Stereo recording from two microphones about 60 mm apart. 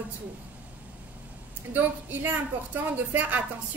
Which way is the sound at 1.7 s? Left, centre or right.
Right.